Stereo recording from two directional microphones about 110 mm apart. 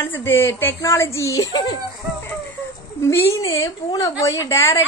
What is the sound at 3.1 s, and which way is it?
A woman's voice, 25° left (ahead or behind).